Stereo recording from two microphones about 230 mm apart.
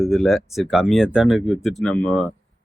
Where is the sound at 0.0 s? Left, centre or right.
Centre.